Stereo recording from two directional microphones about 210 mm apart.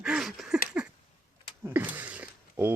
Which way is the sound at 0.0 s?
Centre (ahead or behind).